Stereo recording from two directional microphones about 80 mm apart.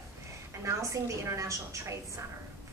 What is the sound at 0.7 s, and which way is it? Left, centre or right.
A woman's voice, right.